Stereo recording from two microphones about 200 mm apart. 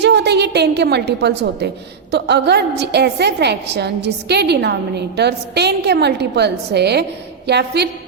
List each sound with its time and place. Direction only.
0.0 s a woman's voice: 55° right (ahead or behind)